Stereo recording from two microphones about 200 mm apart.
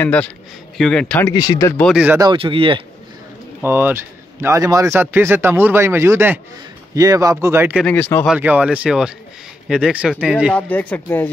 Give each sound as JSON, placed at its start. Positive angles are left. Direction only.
{"t": 0.0, "sound": "speech", "side_deg": 5}
{"t": 1.2, "sound": "speech", "side_deg": 20}
{"t": 1.8, "sound": "speech", "side_deg": 0}
{"t": 2.0, "sound": "speech", "side_deg": -20}
{"t": 3.6, "sound": "speech", "side_deg": -10}
{"t": 7.8, "sound": "speech", "side_deg": 10}
{"t": 8.3, "sound": "speech", "side_deg": -5}
{"t": 10.5, "sound": "speech", "side_deg": 5}